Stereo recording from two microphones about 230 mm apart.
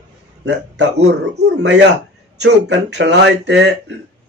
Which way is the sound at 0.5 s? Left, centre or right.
Right.